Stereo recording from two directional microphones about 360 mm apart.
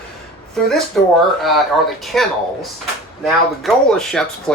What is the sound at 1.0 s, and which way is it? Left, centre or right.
Speech, centre.